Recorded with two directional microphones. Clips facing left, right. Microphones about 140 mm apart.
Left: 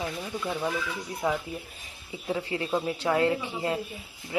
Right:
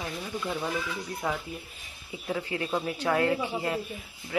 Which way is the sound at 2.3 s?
20° left (ahead or behind).